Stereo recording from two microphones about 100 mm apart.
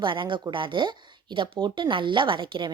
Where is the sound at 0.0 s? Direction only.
55° right (ahead or behind).